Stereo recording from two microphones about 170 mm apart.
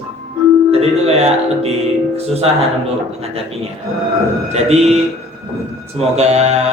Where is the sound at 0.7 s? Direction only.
35° right (ahead or behind).